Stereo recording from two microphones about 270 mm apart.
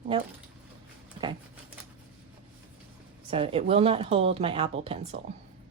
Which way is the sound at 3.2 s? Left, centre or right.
Right.